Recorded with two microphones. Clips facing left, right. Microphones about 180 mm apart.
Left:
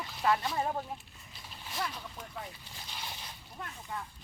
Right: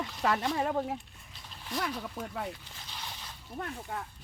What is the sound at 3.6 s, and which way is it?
Speech, 55° right (ahead or behind).